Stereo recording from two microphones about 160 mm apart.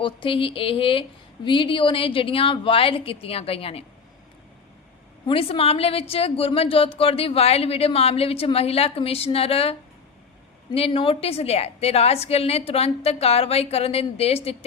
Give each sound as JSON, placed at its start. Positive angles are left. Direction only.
{"t": 0.0, "sound": "a woman's voice", "side_deg": 35}
{"t": 5.2, "sound": "a woman's voice", "side_deg": 35}
{"t": 10.8, "sound": "a woman's voice", "side_deg": 35}